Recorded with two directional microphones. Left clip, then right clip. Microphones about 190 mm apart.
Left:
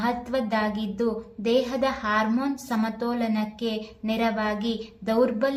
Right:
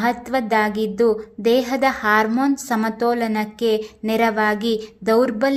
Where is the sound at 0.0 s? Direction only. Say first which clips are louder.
Right 6 dB; 45° right (ahead or behind).